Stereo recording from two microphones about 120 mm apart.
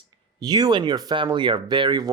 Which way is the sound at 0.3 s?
35° right (ahead or behind).